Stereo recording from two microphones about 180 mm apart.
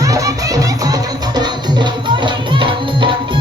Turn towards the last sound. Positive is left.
turn(degrees=-30)  # may be behind; listen again after turning